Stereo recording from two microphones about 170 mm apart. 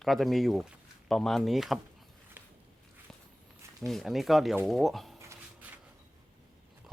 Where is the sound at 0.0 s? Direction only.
Centre (ahead or behind).